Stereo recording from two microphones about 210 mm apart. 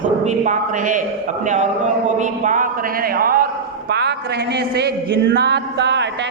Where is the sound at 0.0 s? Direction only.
35° right (ahead or behind).